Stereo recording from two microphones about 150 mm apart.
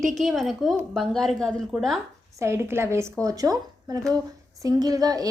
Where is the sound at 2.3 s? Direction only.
20° right (ahead or behind).